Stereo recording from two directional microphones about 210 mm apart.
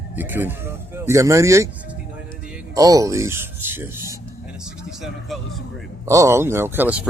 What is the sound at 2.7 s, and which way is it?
Speech, 15° right (ahead or behind).